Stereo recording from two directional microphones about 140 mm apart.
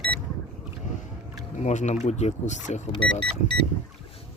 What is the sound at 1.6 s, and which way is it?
Speech, 55° left (ahead or behind).